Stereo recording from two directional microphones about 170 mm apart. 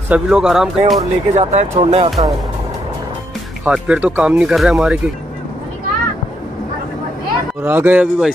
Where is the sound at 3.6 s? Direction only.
5° right (ahead or behind).